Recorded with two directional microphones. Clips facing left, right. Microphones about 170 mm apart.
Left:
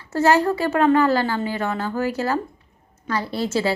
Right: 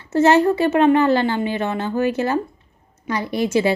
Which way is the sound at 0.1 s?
20° right (ahead or behind).